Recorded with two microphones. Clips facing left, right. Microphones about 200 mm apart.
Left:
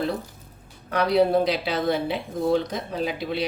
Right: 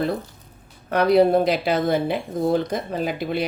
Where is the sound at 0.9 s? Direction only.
55° right (ahead or behind).